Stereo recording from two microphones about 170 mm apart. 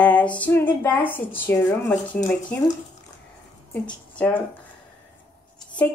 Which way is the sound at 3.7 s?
10° left (ahead or behind).